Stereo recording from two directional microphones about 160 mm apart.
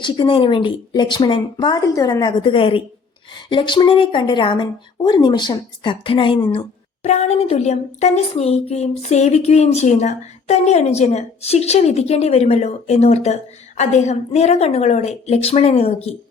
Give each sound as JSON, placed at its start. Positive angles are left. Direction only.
{"t": 0.0, "sound": "a woman's voice", "side_deg": 30}
{"t": 7.0, "sound": "a woman's voice", "side_deg": 45}